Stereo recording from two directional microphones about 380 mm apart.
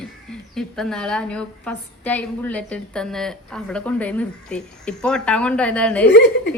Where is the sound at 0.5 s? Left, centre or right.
Centre.